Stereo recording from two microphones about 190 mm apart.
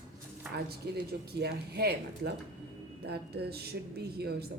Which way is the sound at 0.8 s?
55° right (ahead or behind).